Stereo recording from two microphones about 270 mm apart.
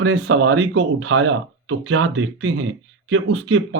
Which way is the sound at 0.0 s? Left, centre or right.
Right.